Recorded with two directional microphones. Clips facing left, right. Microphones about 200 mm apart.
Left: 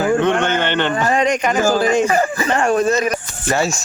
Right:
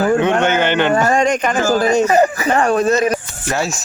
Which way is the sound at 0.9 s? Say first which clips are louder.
Right 2 dB; 45° right (ahead or behind).